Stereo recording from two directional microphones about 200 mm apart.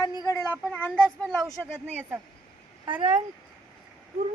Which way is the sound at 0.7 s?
5° left (ahead or behind).